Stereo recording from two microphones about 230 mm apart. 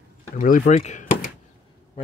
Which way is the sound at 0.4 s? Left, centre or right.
Left.